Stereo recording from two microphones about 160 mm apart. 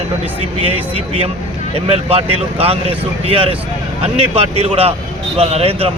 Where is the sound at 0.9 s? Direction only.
40° right (ahead or behind).